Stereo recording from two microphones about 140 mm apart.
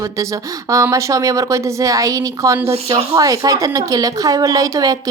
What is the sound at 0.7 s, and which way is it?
Speech, 20° right (ahead or behind).